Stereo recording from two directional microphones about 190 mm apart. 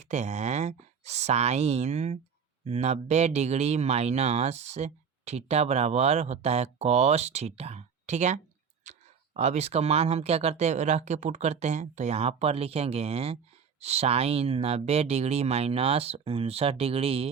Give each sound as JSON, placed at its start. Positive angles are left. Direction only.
{"t": 0.0, "sound": "speech", "side_deg": -35}